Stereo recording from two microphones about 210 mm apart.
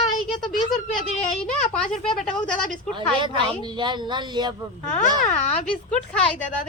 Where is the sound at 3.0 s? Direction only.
25° right (ahead or behind).